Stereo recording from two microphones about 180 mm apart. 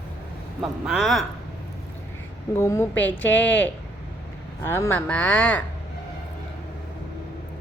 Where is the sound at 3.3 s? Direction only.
80° left.